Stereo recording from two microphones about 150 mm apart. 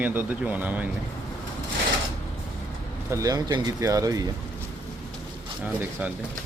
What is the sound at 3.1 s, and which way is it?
A man's voice, 25° right (ahead or behind).